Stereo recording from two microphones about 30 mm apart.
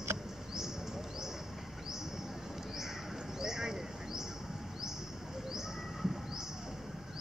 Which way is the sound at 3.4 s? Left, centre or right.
Centre.